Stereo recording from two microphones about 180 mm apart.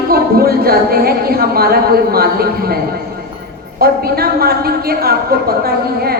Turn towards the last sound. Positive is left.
turn(degrees=-60)  # may be behind; listen again after turning